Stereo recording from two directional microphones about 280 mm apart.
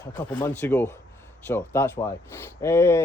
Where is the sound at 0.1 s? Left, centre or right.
Centre.